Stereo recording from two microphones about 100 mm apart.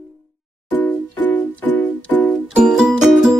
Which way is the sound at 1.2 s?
20° left (ahead or behind).